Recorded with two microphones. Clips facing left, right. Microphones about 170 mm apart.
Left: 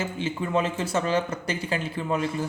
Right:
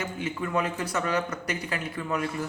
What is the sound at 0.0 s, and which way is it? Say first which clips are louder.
Speech: left 2 dB; 25° left (ahead or behind).